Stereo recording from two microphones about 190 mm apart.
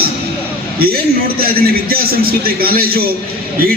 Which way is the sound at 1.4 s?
50° right (ahead or behind).